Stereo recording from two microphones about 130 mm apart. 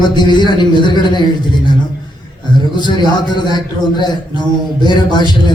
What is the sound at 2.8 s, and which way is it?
A man's voice, 35° left (ahead or behind).